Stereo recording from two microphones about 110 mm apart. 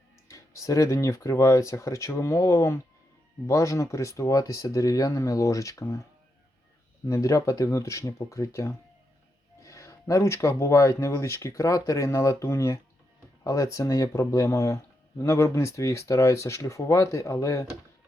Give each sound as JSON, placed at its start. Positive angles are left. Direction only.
{"t": 0.3, "sound": "speech", "side_deg": 30}
{"t": 7.1, "sound": "speech", "side_deg": 30}